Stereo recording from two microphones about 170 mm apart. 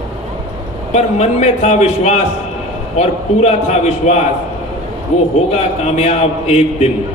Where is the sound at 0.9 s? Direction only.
40° left (ahead or behind).